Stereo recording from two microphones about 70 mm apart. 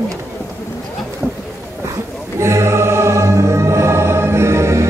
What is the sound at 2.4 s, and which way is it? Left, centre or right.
Music, right.